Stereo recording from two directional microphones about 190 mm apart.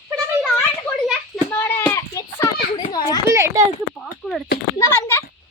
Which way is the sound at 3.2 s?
15° right (ahead or behind).